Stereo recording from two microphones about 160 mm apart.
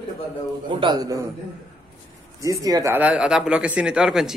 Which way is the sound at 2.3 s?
20° right (ahead or behind).